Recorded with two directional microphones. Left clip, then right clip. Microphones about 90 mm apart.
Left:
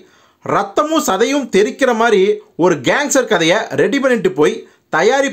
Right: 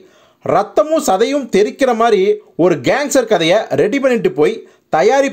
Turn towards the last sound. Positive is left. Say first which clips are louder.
# right 1 dB
turn(degrees=-25)  # may be behind; listen again after turning